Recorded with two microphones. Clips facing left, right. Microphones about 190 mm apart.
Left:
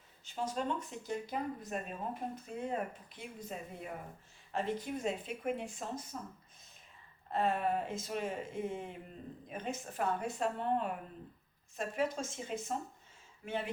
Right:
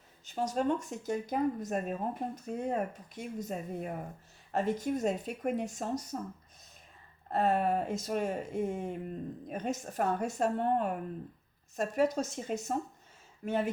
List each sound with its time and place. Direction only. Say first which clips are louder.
0.3 s speech: right 6 dB; 45° right (ahead or behind)
7.3 s speech: right 4 dB; 45° right (ahead or behind)